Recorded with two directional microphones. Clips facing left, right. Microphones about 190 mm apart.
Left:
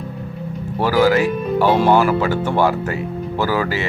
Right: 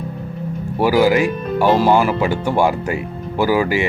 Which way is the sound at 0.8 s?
15° right (ahead or behind).